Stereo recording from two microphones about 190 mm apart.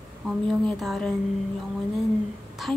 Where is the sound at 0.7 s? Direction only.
Centre (ahead or behind).